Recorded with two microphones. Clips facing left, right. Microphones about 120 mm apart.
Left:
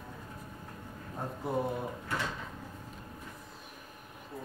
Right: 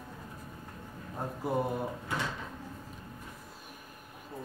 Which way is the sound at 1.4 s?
5° right (ahead or behind).